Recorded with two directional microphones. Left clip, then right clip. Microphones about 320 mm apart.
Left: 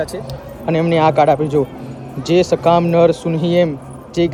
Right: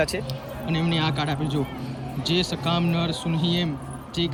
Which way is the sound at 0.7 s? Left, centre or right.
Centre.